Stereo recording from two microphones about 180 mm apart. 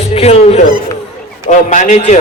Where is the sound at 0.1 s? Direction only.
35° left (ahead or behind).